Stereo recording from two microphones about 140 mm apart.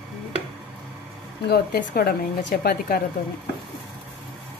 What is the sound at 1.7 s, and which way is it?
A woman's voice, 90° left.